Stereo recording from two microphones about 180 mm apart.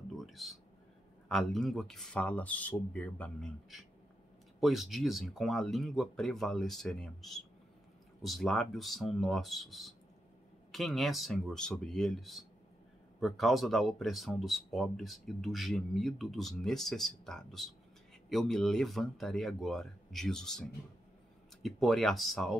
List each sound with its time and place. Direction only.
0.1 s a sound: centre (ahead or behind)
1.3 s speech: centre (ahead or behind)
21.6 s speech: centre (ahead or behind)